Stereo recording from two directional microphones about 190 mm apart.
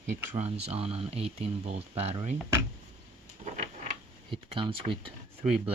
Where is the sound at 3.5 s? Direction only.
35° right (ahead or behind).